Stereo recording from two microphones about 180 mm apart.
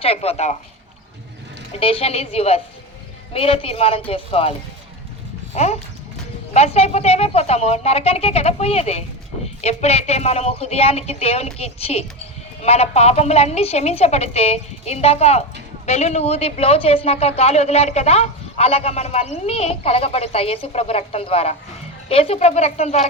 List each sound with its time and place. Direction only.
0.0 s speech: 35° left (ahead or behind)
1.7 s speech: 30° left (ahead or behind)
5.5 s speech: 35° left (ahead or behind)